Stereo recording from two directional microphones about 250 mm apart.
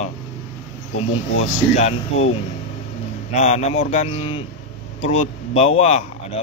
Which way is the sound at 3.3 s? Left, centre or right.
Left.